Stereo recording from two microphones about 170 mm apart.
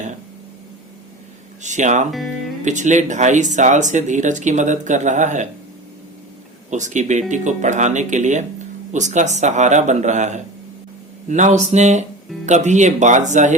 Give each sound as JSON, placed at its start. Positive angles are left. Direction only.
{"t": 1.6, "sound": "speech", "side_deg": -45}
{"t": 6.7, "sound": "speech", "side_deg": -45}